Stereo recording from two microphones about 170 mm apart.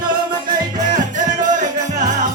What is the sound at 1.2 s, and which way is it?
Music, 50° right (ahead or behind).